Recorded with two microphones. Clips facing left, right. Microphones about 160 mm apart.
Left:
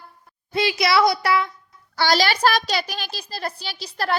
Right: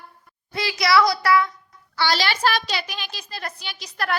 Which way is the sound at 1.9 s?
40° left (ahead or behind).